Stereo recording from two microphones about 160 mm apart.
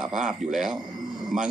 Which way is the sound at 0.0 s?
5° right (ahead or behind).